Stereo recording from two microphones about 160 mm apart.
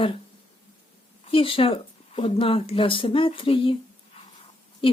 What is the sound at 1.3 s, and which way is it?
Speech, 35° left (ahead or behind).